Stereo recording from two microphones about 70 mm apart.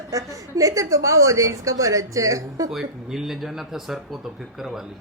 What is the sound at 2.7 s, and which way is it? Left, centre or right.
Speech, centre.